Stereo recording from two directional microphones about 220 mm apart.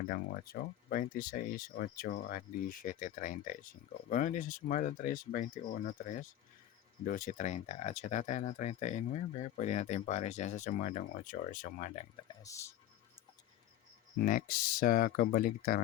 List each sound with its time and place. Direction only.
0.1 s speech: 45° left (ahead or behind)
12.1 s speech: 15° left (ahead or behind)
14.2 s speech: 40° left (ahead or behind)